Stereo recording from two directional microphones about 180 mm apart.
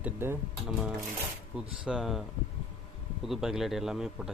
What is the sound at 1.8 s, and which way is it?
Speech, 5° right (ahead or behind).